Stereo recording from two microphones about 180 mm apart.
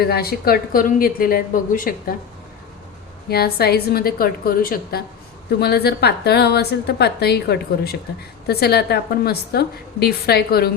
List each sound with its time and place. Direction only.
0.0 s speech: 60° left (ahead or behind)
3.2 s a woman's voice: 60° left (ahead or behind)